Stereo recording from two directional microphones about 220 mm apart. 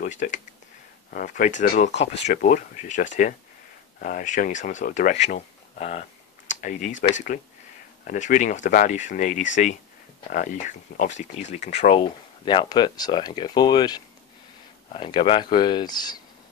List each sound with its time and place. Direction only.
0.0 s speech: 35° left (ahead or behind)
8.1 s speech: 35° left (ahead or behind); by 16.2 s 20° left (ahead or behind)